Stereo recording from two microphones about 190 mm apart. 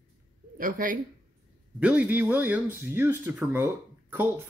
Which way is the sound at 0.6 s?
45° right (ahead or behind).